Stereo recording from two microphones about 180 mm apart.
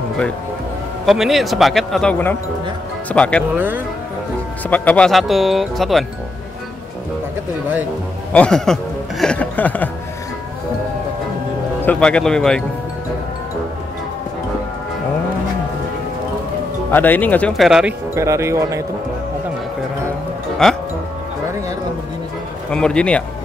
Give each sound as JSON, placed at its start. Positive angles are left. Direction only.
{"t": 1.0, "sound": "speech", "side_deg": 0}
{"t": 3.5, "sound": "speech", "side_deg": -10}
{"t": 4.6, "sound": "speech", "side_deg": 10}
{"t": 8.3, "sound": "speech", "side_deg": 5}
{"t": 11.8, "sound": "speech", "side_deg": 5}
{"t": 16.9, "sound": "speech", "side_deg": 10}
{"t": 18.1, "sound": "speech", "side_deg": -15}
{"t": 20.6, "sound": "speech", "side_deg": 0}
{"t": 22.7, "sound": "speech", "side_deg": 5}